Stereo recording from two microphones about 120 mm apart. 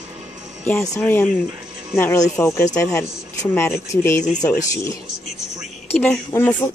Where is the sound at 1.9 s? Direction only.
20° left (ahead or behind).